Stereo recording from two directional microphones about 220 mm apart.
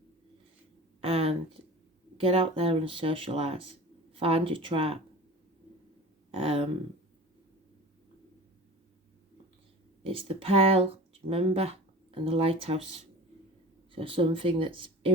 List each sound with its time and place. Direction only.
1.1 s a sound: 25° right (ahead or behind)
2.1 s speech: 25° right (ahead or behind)
6.4 s speech: 25° right (ahead or behind)
10.1 s speech: 25° right (ahead or behind)
13.9 s speech: 25° right (ahead or behind)